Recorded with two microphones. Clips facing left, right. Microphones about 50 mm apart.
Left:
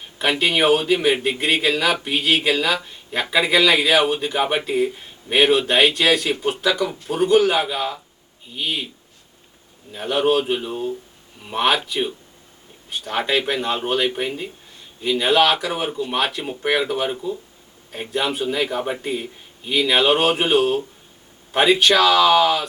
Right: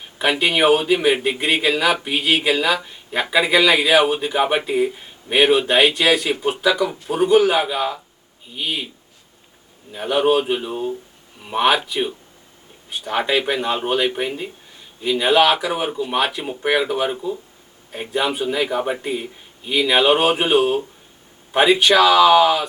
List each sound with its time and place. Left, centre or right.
0.2 s speech: centre
9.9 s speech: centre